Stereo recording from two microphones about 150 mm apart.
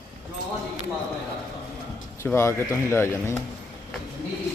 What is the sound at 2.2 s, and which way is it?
A man's voice, 20° left (ahead or behind).